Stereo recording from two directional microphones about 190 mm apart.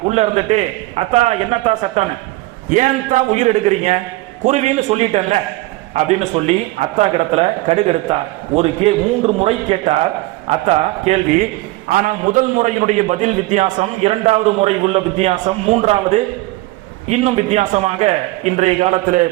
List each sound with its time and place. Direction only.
0.1 s a man's voice: 35° right (ahead or behind)
11.9 s a man's voice: 45° right (ahead or behind)